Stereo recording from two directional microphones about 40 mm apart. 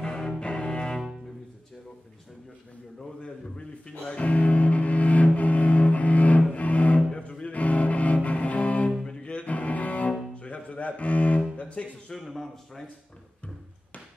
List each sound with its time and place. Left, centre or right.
0.0 s cello: centre
3.2 s a sound: left
4.1 s music: left
9.0 s music: left
12.1 s a man's voice: centre